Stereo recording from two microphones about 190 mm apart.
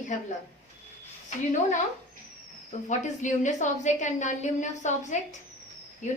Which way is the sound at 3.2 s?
40° left (ahead or behind).